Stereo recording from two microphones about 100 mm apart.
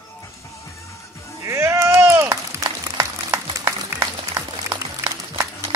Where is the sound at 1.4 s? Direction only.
25° right (ahead or behind).